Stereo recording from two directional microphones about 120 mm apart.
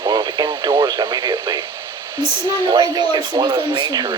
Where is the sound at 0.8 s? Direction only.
40° right (ahead or behind).